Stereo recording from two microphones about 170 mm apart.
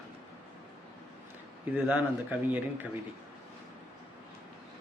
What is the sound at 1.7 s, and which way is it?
Speech, 10° right (ahead or behind).